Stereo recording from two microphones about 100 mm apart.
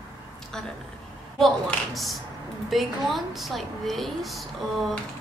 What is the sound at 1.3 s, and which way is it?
A woman's voice, centre (ahead or behind).